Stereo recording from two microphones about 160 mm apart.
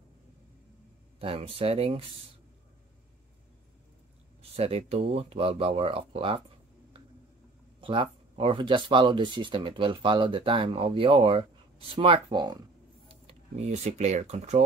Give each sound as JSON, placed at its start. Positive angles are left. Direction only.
{"t": 1.2, "sound": "speech", "side_deg": -35}
{"t": 4.4, "sound": "speech", "side_deg": -40}
{"t": 7.8, "sound": "speech", "side_deg": -30}
{"t": 13.1, "sound": "speech", "side_deg": -40}